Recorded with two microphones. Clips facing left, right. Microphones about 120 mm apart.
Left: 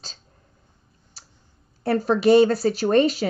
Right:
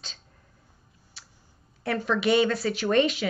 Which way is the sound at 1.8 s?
40° left (ahead or behind).